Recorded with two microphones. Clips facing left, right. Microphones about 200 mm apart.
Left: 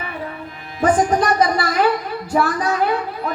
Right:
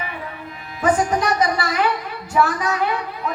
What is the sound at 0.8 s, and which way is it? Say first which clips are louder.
Speech: left 3 dB; 40° left (ahead or behind).